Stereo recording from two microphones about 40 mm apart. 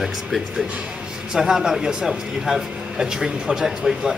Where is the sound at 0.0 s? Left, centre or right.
Centre.